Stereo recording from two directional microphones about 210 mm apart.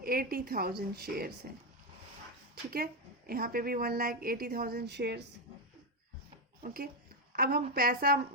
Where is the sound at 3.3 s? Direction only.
45° right (ahead or behind).